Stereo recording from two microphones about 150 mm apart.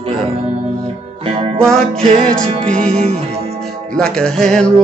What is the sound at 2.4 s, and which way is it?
Mantra, 40° right (ahead or behind).